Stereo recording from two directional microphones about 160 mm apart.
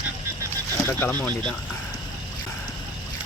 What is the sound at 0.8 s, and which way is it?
Speech, 15° left (ahead or behind).